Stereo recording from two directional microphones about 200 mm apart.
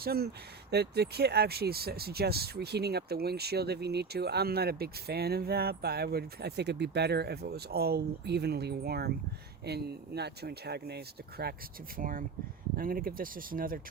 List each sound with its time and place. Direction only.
0.0 s speech: 50° right (ahead or behind)